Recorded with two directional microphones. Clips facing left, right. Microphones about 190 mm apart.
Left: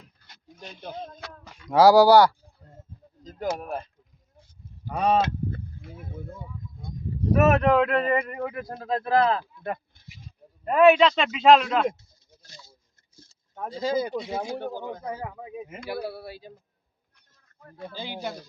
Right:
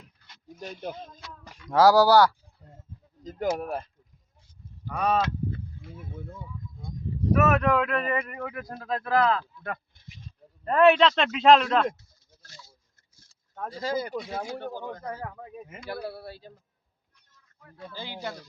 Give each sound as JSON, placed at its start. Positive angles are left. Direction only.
{"t": 1.7, "sound": "speech", "side_deg": 15}
{"t": 4.9, "sound": "speech", "side_deg": 25}
{"t": 7.3, "sound": "speech", "side_deg": 30}
{"t": 10.1, "sound": "a sound", "side_deg": 10}
{"t": 11.1, "sound": "speech", "side_deg": 0}
{"t": 11.9, "sound": "a sound", "side_deg": 15}
{"t": 14.2, "sound": "speech", "side_deg": 15}
{"t": 17.6, "sound": "speech", "side_deg": 50}
{"t": 17.9, "sound": "speech", "side_deg": 15}